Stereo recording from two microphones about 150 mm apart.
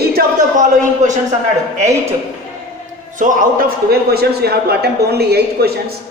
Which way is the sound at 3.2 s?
65° right (ahead or behind).